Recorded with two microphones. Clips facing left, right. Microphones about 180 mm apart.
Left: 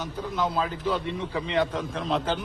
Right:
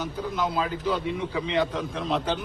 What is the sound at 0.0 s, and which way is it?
Speech, 5° right (ahead or behind).